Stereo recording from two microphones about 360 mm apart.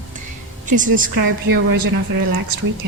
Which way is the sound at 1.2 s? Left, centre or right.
Right.